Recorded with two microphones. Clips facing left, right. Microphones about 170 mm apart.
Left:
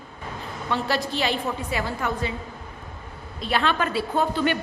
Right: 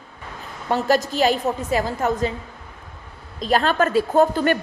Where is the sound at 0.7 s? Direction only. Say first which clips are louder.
Right 6 dB; 45° right (ahead or behind).